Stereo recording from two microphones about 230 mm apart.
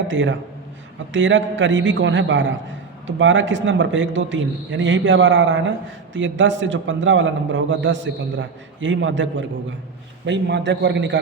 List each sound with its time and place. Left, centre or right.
0.1 s a man's voice: right